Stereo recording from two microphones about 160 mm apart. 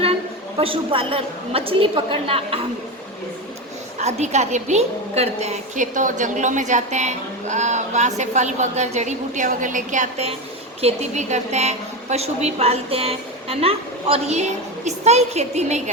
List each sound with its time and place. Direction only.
0.5 s a woman's voice: 35° right (ahead or behind)
4.0 s a woman's voice: 45° right (ahead or behind)